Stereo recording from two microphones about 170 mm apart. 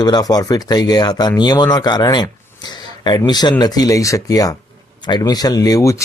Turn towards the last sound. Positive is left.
turn(degrees=20)  # may be behind; listen again after turning